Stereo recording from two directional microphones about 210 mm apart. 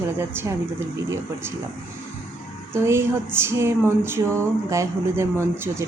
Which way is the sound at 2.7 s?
10° right (ahead or behind).